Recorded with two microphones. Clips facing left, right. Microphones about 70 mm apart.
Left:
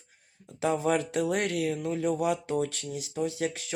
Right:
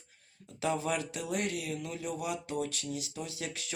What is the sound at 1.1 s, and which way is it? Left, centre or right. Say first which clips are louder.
Speech: left 7 dB; left.